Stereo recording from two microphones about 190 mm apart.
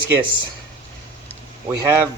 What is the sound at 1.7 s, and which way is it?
Speech, 15° right (ahead or behind).